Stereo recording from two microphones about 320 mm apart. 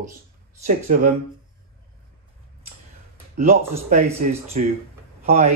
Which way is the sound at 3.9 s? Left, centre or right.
Right.